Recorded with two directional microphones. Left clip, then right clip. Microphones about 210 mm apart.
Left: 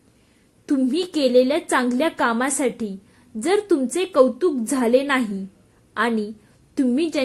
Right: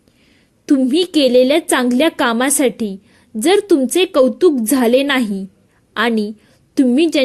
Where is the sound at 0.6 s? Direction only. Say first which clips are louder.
Right 7 dB; 35° right (ahead or behind).